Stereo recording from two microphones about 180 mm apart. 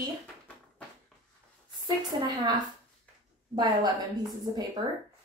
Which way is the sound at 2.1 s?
25° right (ahead or behind).